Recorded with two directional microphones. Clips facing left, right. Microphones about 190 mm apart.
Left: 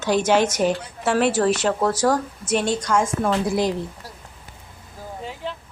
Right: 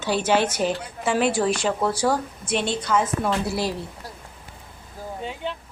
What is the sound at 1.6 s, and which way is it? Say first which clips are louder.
Speech: left 2 dB; 10° right (ahead or behind).